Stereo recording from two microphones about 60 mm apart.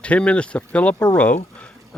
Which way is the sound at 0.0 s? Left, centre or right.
Left.